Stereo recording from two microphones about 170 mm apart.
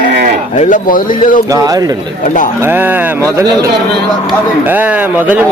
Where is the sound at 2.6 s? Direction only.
10° right (ahead or behind).